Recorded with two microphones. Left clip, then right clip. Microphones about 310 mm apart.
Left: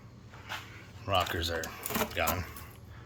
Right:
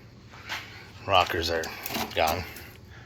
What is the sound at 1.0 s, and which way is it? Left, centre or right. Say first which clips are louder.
Speech: right 7 dB; centre.